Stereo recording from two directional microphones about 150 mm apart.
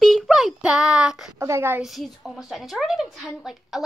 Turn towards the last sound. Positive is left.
turn(degrees=0)  # may be behind; listen again after turning